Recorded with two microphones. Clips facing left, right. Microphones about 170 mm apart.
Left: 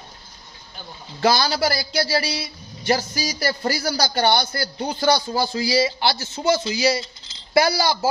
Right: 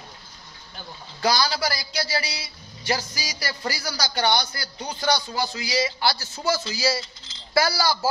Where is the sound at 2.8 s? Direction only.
50° left (ahead or behind).